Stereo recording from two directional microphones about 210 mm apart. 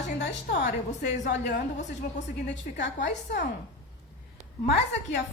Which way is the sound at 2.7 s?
55° left (ahead or behind).